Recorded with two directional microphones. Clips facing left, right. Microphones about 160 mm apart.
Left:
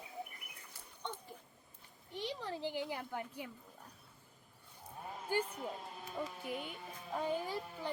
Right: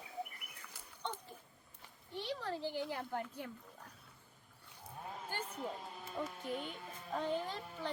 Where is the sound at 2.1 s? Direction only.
15° left (ahead or behind).